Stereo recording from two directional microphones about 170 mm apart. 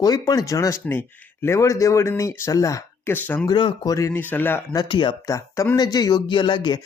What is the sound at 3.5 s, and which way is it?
Speech, 25° left (ahead or behind).